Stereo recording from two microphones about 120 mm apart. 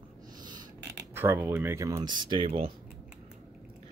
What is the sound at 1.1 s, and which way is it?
Speech, 20° right (ahead or behind).